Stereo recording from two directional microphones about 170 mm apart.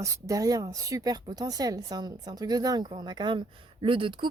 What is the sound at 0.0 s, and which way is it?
Speech, 20° right (ahead or behind).